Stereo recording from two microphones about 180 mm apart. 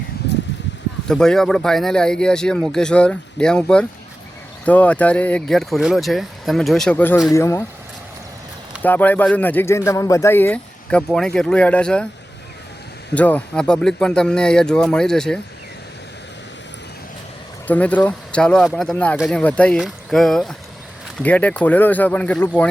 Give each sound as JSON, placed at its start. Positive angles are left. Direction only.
{"t": 1.0, "sound": "speech", "side_deg": 5}
{"t": 8.8, "sound": "speech", "side_deg": 10}
{"t": 13.1, "sound": "speech", "side_deg": 10}
{"t": 17.7, "sound": "speech", "side_deg": 10}